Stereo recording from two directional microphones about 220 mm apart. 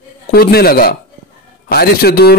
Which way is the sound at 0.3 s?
45° left (ahead or behind).